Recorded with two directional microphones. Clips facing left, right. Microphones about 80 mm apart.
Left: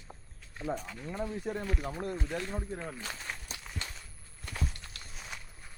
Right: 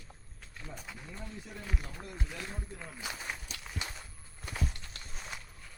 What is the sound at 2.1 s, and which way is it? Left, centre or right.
Speech, centre.